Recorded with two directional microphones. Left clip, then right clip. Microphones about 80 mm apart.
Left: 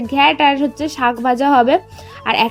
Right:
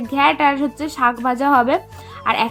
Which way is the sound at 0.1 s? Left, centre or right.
Left.